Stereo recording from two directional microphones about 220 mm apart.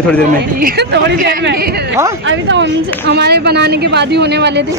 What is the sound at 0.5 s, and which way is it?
Speech, 45° right (ahead or behind).